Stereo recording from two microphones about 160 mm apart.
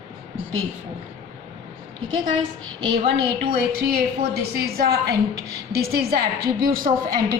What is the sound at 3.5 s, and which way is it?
A woman's voice, 70° right (ahead or behind).